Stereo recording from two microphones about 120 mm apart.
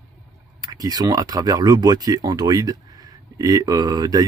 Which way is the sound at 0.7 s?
30° right (ahead or behind).